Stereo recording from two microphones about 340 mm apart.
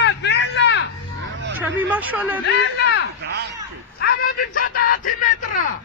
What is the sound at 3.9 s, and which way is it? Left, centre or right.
Speech, left.